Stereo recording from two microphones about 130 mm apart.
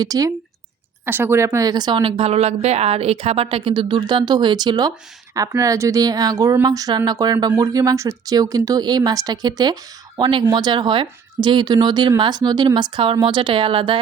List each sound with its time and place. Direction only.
0.0 s speech: 30° right (ahead or behind)
1.0 s a woman's voice: 15° right (ahead or behind); by 14.0 s 45° right (ahead or behind)